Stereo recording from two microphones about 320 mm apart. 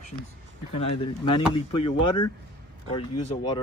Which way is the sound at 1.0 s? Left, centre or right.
Centre.